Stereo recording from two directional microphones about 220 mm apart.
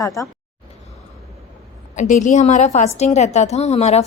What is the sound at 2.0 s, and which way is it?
A woman's voice, 35° left (ahead or behind).